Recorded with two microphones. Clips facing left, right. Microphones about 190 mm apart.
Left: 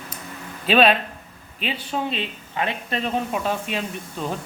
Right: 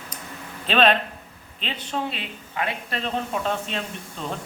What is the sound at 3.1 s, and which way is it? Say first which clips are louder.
Speech: even; 10° left (ahead or behind).